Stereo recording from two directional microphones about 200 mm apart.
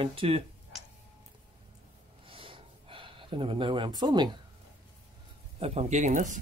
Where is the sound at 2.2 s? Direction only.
25° right (ahead or behind).